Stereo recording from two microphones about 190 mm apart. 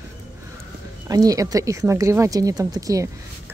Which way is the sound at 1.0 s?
20° right (ahead or behind).